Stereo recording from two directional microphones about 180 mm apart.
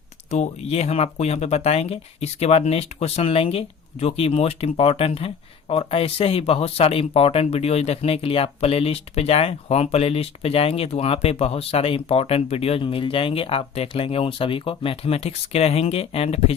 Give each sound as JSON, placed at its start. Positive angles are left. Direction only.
{"t": 0.3, "sound": "speech", "side_deg": 35}